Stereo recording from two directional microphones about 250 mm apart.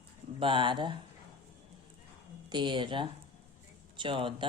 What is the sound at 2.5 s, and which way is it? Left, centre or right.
Speech, centre.